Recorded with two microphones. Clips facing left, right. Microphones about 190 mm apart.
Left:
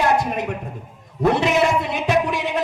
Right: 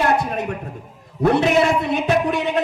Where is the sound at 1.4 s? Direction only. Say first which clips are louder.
Right 2 dB; 60° right (ahead or behind).